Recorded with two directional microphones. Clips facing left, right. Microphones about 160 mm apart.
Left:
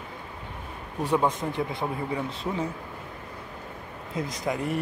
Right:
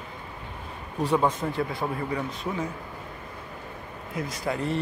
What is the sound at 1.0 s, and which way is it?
Speech, 10° left (ahead or behind).